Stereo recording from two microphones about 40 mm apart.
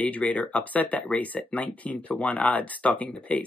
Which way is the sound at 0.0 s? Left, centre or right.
Left.